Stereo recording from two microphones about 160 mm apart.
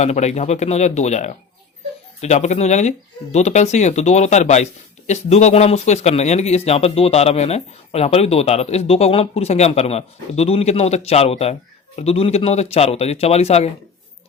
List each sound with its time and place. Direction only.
0.0 s speech: 45° left (ahead or behind)